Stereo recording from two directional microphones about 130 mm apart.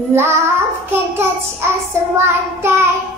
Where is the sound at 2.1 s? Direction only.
20° right (ahead or behind).